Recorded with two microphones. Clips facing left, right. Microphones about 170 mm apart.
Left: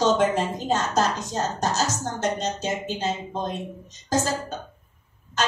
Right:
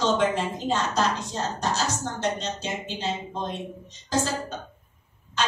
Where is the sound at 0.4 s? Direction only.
45° left (ahead or behind).